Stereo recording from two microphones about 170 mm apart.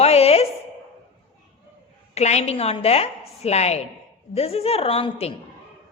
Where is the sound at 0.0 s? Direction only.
40° left (ahead or behind).